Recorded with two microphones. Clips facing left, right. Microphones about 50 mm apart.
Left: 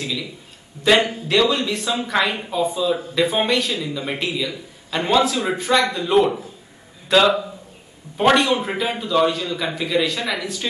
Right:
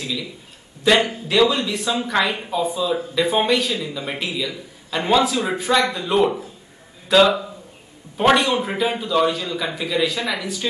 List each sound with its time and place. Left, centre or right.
0.0 s a man's voice: centre